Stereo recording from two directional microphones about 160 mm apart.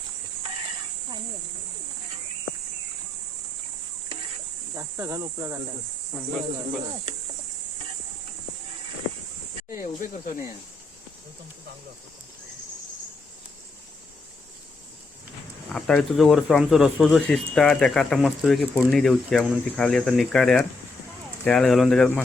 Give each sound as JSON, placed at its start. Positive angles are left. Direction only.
{"t": 4.7, "sound": "speech", "side_deg": -15}
{"t": 9.7, "sound": "speech", "side_deg": 55}
{"t": 15.7, "sound": "speech", "side_deg": 5}